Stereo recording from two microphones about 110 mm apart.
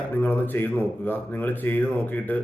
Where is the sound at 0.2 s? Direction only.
20° left (ahead or behind).